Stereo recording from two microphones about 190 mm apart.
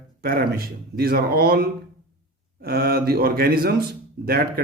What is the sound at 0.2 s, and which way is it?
A man's voice, 55° right (ahead or behind).